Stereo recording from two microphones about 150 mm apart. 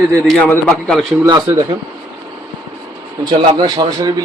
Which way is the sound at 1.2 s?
30° right (ahead or behind).